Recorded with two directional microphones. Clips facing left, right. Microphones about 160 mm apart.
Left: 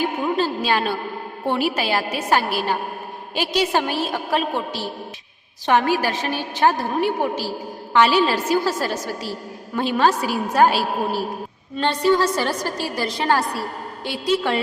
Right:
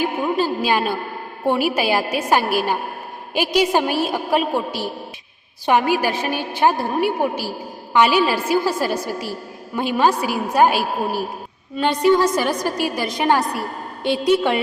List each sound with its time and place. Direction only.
0.0 s a woman's voice: 10° right (ahead or behind)